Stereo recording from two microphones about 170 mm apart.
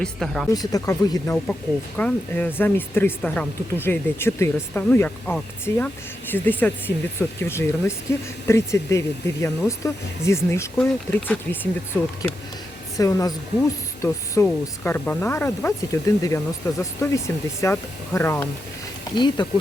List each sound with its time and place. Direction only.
0.0 s speech: centre (ahead or behind)
0.5 s speech: 20° left (ahead or behind)
2.0 s speech: 10° left (ahead or behind)
19.1 s speech: 25° left (ahead or behind)